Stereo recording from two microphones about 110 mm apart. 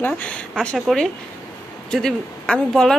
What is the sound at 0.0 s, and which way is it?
A man's voice, 10° left (ahead or behind).